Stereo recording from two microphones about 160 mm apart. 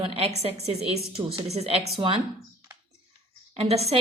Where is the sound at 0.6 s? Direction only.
40° right (ahead or behind).